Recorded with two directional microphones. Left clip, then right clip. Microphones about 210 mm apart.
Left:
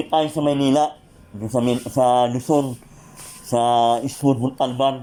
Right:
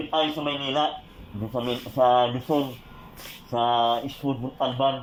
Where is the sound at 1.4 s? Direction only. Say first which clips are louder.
Left 7 dB; 20° left (ahead or behind).